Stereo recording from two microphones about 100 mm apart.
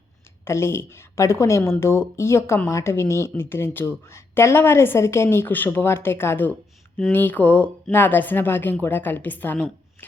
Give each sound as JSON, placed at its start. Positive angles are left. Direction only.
{"t": 0.4, "sound": "a woman's voice", "side_deg": 25}